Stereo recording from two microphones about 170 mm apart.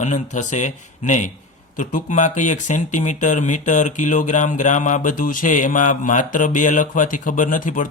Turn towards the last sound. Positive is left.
turn(degrees=50)  # may be behind; listen again after turning